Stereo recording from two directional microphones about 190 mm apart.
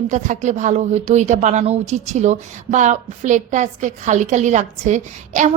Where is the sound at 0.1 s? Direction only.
40° right (ahead or behind).